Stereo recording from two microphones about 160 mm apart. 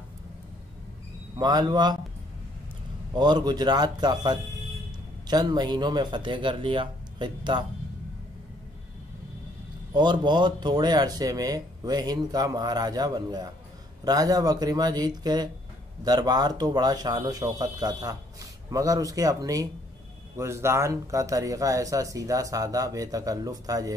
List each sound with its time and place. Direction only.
1.4 s speech: 25° right (ahead or behind)
3.2 s speech: 25° right (ahead or behind)
9.9 s speech: 30° right (ahead or behind)